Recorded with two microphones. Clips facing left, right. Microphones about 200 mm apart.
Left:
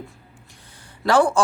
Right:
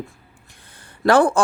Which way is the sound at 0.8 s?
55° right (ahead or behind).